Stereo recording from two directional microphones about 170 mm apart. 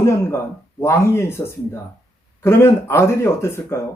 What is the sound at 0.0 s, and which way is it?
A man's voice, 15° left (ahead or behind).